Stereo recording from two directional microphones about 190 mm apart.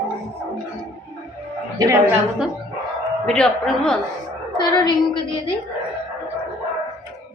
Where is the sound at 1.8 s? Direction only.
15° right (ahead or behind).